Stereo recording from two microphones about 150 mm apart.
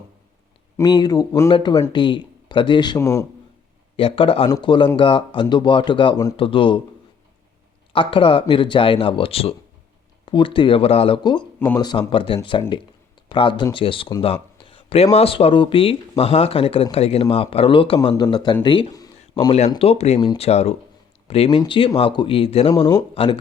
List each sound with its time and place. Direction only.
0.8 s speech: 25° left (ahead or behind)
3.0 s speech: 20° left (ahead or behind)
3.9 s speech: 35° left (ahead or behind)
7.9 s speech: 35° left (ahead or behind)
19.8 s speech: 45° left (ahead or behind)
22.7 s speech: 25° left (ahead or behind)
23.1 s speech: 40° left (ahead or behind)